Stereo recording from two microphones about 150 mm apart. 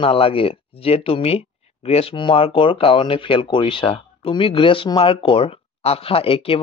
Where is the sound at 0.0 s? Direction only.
40° left (ahead or behind).